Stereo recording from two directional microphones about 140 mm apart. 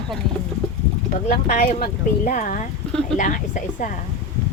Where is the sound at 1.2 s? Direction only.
65° left (ahead or behind).